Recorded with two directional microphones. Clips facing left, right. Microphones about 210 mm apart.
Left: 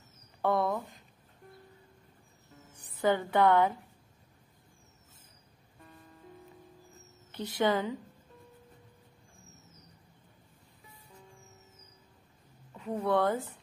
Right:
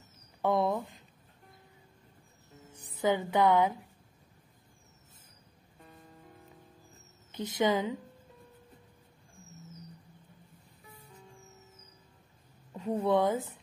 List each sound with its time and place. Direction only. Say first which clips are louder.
0.4 s a sound: right 1 dB; 20° right (ahead or behind)
3.0 s a woman's voice: left 1 dB; 15° right (ahead or behind)
7.3 s a woman's voice: even; 15° right (ahead or behind)
12.9 s speech: right 1 dB; 20° right (ahead or behind)